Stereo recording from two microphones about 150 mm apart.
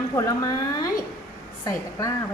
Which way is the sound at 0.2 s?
20° left (ahead or behind).